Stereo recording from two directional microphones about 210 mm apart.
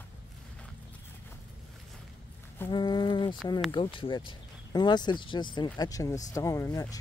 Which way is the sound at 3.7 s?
25° left (ahead or behind).